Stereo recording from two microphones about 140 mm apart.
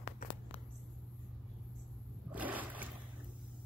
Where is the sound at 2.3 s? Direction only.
10° right (ahead or behind).